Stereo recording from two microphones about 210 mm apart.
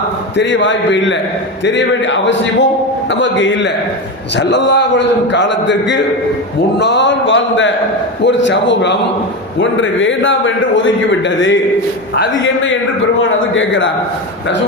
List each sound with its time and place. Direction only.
0.3 s a man's voice: 60° left (ahead or behind)